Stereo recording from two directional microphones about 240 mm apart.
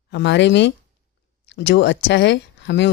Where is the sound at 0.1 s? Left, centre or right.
Left.